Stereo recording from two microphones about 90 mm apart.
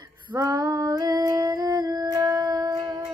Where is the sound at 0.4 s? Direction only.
45° right (ahead or behind).